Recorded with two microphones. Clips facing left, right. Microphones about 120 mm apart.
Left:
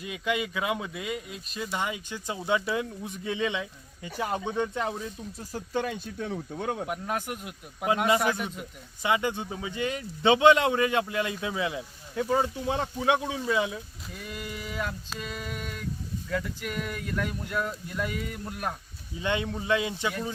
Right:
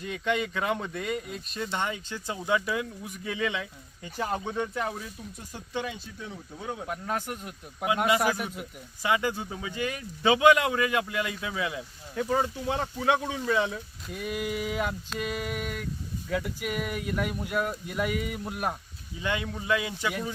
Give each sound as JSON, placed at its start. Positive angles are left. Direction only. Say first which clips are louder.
{"t": 0.0, "sound": "speech", "louder": "right 1 dB", "side_deg": 10}
{"t": 5.0, "sound": "speech", "louder": "left 4 dB", "side_deg": 35}
{"t": 6.8, "sound": "a man's voice", "louder": "left 1 dB", "side_deg": 10}
{"t": 9.0, "sound": "speech", "louder": "even", "side_deg": 20}
{"t": 14.1, "sound": "speech", "louder": "right 7 dB", "side_deg": -5}
{"t": 19.2, "sound": "speech", "louder": "left 2 dB", "side_deg": 25}